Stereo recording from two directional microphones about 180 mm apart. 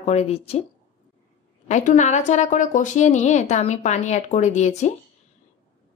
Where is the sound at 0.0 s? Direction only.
35° left (ahead or behind).